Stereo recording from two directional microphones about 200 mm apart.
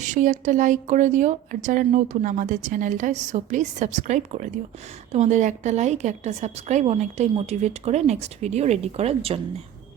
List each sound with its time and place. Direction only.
0.0 s speech: 40° right (ahead or behind)